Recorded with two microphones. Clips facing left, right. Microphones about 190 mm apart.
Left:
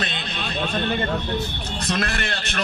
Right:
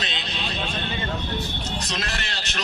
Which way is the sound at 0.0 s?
55° left (ahead or behind).